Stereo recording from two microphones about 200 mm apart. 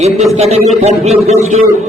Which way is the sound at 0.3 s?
30° right (ahead or behind).